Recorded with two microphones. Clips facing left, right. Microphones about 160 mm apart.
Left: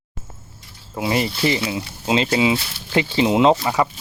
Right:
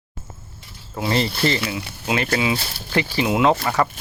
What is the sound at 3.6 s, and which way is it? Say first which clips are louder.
Speech: left 1 dB; 15° left (ahead or behind).